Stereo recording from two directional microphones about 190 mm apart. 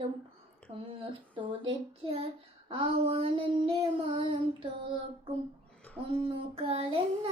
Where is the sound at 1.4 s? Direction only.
30° right (ahead or behind).